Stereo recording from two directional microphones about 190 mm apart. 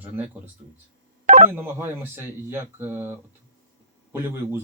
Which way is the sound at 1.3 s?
40° right (ahead or behind).